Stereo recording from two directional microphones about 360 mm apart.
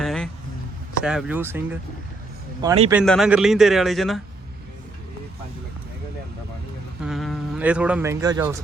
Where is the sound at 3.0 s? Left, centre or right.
Centre.